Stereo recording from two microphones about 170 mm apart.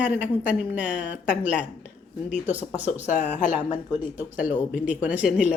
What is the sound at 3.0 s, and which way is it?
Speech, 45° left (ahead or behind).